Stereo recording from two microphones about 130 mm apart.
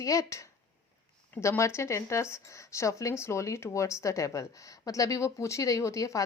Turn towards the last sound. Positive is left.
turn(degrees=25)  # may be behind; listen again after turning